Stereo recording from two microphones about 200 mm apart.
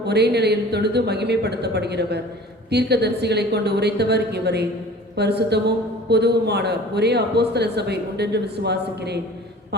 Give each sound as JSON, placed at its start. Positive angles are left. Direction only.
{"t": 0.0, "sound": "a man's voice", "side_deg": -55}